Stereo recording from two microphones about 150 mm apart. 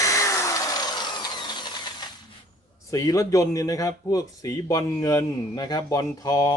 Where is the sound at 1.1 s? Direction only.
30° left (ahead or behind).